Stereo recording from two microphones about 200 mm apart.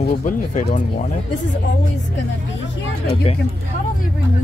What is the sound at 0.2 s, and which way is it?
Speech, 40° left (ahead or behind).